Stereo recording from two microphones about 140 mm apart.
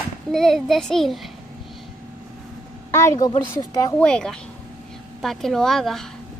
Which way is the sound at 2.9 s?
25° left (ahead or behind).